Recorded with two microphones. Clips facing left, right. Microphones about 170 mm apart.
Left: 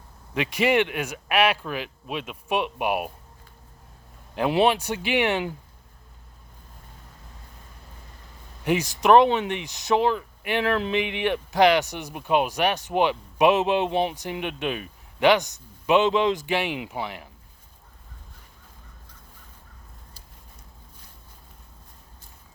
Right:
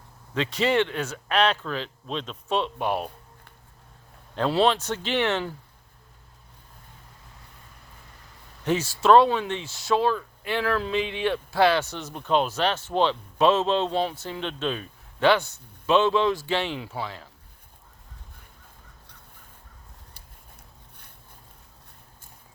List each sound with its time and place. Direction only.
0.3 s speech: 15° left (ahead or behind)
4.4 s speech: 15° left (ahead or behind)
8.6 s speech: 15° left (ahead or behind)